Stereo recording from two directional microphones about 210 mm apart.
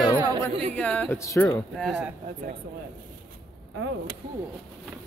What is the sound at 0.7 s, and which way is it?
Speech, 5° left (ahead or behind).